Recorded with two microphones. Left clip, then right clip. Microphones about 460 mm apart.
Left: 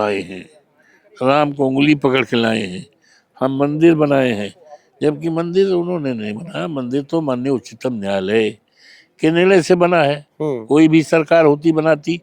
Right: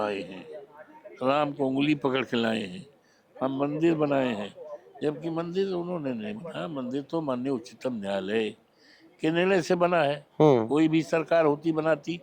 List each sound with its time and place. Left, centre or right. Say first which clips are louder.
0.0 s a man's voice: left 11 dB; left
10.3 s speech: right 2 dB; centre
10.7 s a man's voice: left 12 dB; left